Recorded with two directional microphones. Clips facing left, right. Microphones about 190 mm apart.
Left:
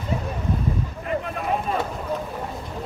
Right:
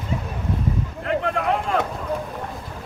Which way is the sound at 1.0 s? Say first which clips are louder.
Right 5 dB; 85° right.